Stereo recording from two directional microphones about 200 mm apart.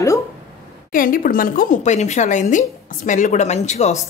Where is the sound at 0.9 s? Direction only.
45° left (ahead or behind).